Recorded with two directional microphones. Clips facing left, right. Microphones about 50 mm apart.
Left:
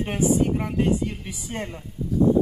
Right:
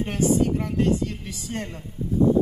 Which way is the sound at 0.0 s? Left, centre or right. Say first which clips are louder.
Even; centre.